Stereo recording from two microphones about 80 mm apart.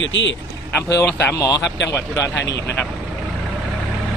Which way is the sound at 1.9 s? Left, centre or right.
Left.